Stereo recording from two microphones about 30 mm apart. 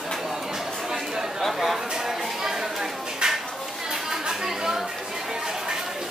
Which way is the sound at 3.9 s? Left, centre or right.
Centre.